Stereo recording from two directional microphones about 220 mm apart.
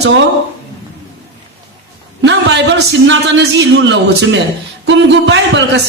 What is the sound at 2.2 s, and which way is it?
A man's voice, 55° right (ahead or behind).